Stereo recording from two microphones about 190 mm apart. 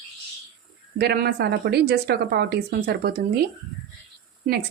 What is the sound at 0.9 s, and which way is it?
A woman's voice, 55° right (ahead or behind).